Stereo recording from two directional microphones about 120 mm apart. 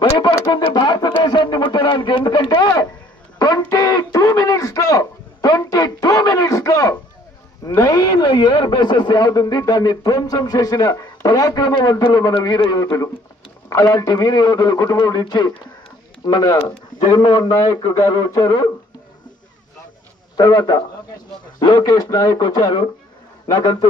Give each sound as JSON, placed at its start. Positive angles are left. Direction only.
{"t": 0.2, "sound": "speech", "side_deg": 45}
{"t": 1.2, "sound": "a sound", "side_deg": 40}
{"t": 7.9, "sound": "speech", "side_deg": 40}
{"t": 20.3, "sound": "a man's voice", "side_deg": 35}